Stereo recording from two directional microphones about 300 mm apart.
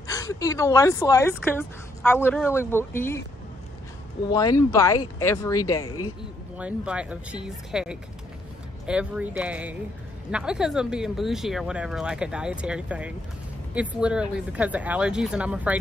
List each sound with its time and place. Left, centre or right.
0.1 s speech: centre
4.3 s speech: centre
6.6 s speech: centre